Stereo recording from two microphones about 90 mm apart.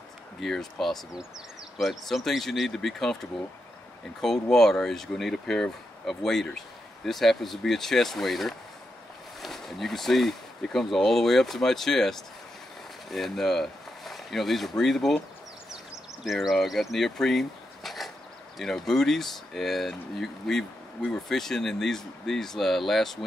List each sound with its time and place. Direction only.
0.4 s speech: 5° left (ahead or behind)
16.3 s speech: centre (ahead or behind)